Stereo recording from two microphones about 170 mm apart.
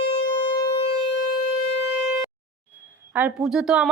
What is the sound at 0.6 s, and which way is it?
Siren, 30° left (ahead or behind).